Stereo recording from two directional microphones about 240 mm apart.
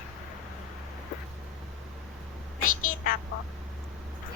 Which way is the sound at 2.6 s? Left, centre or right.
Left.